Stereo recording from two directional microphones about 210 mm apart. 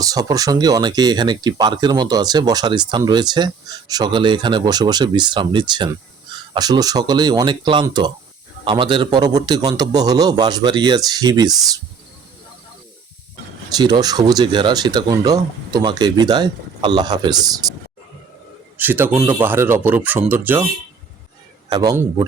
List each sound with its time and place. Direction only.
0.0 s speech: 15° right (ahead or behind)
13.7 s speech: 20° right (ahead or behind)
18.8 s speech: 10° right (ahead or behind)
21.7 s speech: 15° right (ahead or behind)